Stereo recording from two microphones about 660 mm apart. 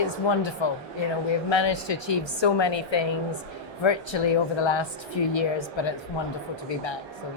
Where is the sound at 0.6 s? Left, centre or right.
Left.